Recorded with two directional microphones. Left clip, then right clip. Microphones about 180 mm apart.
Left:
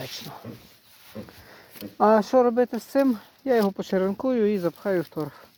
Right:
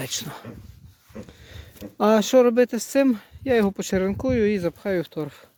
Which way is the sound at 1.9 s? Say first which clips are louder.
Right 1 dB; 35° right (ahead or behind).